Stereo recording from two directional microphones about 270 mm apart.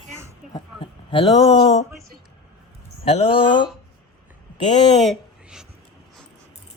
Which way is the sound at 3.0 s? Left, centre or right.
Left.